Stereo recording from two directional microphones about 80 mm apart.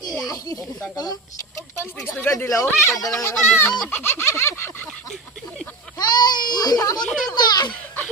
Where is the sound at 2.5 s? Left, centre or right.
Left.